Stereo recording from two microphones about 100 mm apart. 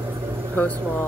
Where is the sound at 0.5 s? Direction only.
15° left (ahead or behind).